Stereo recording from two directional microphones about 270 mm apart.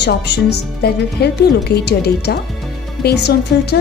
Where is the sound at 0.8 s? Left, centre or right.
Left.